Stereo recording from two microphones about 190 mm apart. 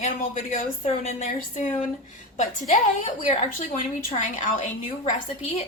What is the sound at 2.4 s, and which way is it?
Speech, 40° left (ahead or behind).